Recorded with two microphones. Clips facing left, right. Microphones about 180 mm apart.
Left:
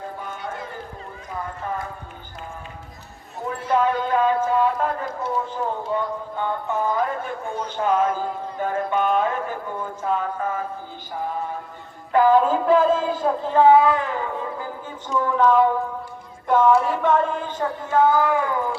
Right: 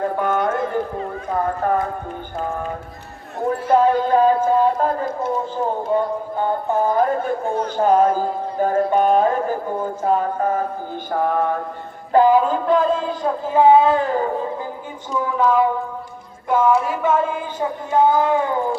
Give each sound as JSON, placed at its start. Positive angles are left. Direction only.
{"t": 0.0, "sound": "clip-clop", "side_deg": -70}
{"t": 0.6, "sound": "run", "side_deg": -60}
{"t": 1.0, "sound": "speech", "side_deg": -60}
{"t": 3.8, "sound": "speech", "side_deg": -35}
{"t": 11.1, "sound": "speech", "side_deg": -65}
{"t": 12.3, "sound": "a sound", "side_deg": 0}
{"t": 13.6, "sound": "speech", "side_deg": -20}
{"t": 15.1, "sound": "a sound", "side_deg": -5}
{"t": 17.9, "sound": "speech", "side_deg": -20}